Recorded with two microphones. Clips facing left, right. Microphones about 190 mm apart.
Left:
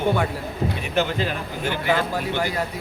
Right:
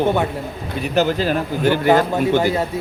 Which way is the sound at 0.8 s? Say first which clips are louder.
Right 8 dB; 40° right (ahead or behind).